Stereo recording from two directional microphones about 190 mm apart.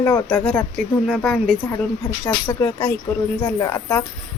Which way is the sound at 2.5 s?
15° left (ahead or behind).